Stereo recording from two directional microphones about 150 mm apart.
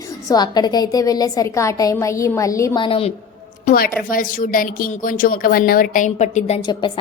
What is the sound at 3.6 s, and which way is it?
A woman's voice, 70° left (ahead or behind).